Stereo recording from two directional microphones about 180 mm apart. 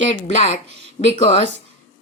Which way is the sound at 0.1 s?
40° left (ahead or behind).